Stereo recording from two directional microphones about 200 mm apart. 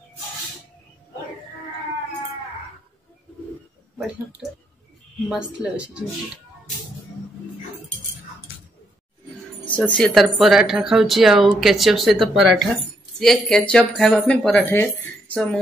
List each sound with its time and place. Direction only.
4.4 s speech: centre (ahead or behind)
9.7 s speech: 5° left (ahead or behind)